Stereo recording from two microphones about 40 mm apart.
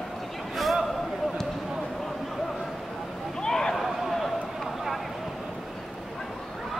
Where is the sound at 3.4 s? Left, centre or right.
Centre.